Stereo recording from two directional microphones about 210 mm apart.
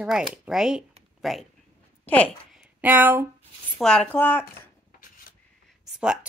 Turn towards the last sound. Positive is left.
turn(degrees=-5)  # may be behind; listen again after turning